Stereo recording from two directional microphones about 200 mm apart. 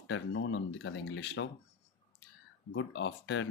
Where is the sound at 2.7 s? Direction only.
65° left (ahead or behind).